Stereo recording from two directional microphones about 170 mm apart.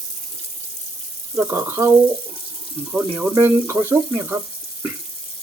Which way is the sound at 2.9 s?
10° right (ahead or behind).